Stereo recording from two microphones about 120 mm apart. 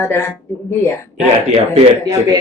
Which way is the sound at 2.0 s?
30° right (ahead or behind).